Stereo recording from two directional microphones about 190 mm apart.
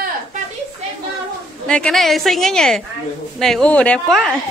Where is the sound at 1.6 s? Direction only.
5° left (ahead or behind).